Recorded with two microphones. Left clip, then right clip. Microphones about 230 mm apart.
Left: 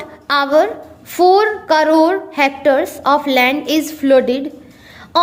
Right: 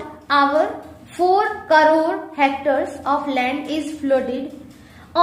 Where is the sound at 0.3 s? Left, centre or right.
Left.